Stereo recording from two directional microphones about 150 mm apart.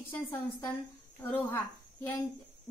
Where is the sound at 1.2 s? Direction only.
15° left (ahead or behind).